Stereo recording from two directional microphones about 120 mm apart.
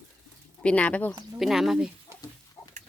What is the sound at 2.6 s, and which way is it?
Pig, 25° left (ahead or behind).